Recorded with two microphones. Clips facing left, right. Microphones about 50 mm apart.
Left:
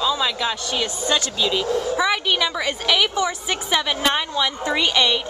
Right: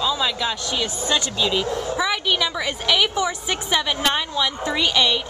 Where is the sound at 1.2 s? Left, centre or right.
Centre.